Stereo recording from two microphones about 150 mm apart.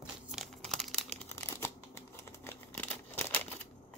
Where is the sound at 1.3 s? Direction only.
15° left (ahead or behind).